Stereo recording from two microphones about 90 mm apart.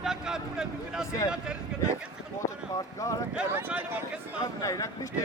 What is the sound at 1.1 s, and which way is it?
Speech, 35° left (ahead or behind).